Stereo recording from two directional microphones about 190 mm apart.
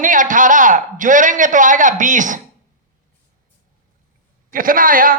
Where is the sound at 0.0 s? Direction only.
45° right (ahead or behind).